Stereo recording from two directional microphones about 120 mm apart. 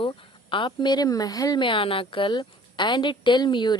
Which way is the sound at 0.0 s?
45° left (ahead or behind).